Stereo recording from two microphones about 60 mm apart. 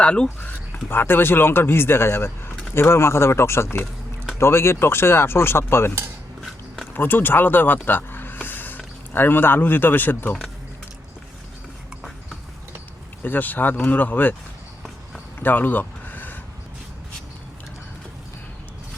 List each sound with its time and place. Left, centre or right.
0.0 s speech: centre
0.3 s speech: left
6.9 s speech: left
7.9 s a sound: left
9.1 s speech: left
13.2 s speech: left
15.4 s a sound: left